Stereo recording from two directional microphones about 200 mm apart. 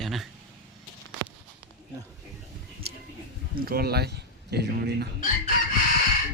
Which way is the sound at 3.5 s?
50° right (ahead or behind).